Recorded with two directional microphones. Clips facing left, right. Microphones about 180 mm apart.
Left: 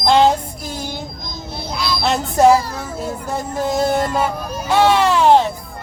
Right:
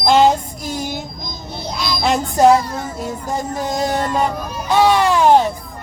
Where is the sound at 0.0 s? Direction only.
15° right (ahead or behind).